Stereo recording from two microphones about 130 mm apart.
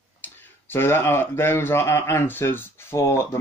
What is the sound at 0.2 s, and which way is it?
Speech, 15° left (ahead or behind).